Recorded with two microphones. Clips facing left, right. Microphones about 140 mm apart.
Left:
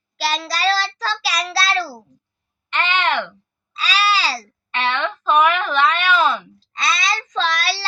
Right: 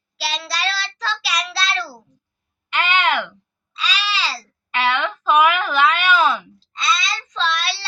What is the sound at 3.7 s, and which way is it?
Child singing, 40° left (ahead or behind).